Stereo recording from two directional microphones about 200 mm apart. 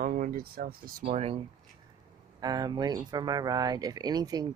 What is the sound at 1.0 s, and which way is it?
Speech, 30° right (ahead or behind).